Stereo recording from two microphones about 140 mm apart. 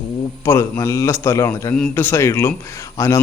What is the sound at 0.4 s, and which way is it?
Speech, 20° left (ahead or behind).